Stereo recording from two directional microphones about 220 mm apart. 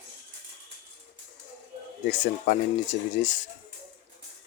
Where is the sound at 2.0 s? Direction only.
35° left (ahead or behind).